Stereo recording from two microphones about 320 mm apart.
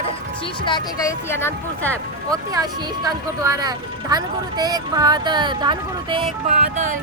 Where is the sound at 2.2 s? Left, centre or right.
Centre.